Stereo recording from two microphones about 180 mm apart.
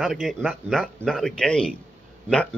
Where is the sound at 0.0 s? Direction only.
Centre (ahead or behind).